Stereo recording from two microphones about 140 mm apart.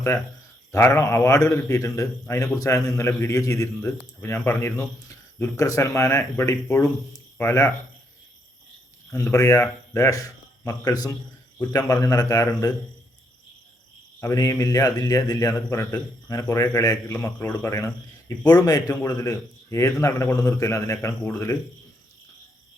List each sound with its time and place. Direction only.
0.7 s a man's voice: 20° left (ahead or behind)
9.3 s a man's voice: 20° left (ahead or behind)
14.2 s a man's voice: 25° left (ahead or behind)